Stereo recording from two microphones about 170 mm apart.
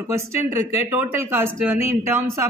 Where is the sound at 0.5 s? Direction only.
15° right (ahead or behind).